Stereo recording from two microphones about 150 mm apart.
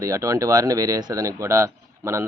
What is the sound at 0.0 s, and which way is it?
Speech, 20° right (ahead or behind).